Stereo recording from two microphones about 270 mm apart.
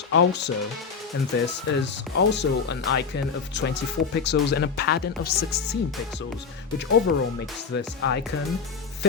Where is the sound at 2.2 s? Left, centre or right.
Left.